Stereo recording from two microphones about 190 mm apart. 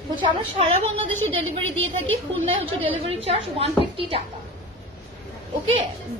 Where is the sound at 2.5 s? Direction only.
30° right (ahead or behind).